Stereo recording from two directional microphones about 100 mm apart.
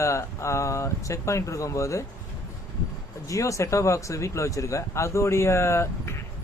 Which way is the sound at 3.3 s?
35° left (ahead or behind).